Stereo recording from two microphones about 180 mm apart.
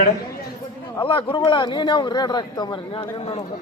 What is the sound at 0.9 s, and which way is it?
Speech, 30° left (ahead or behind).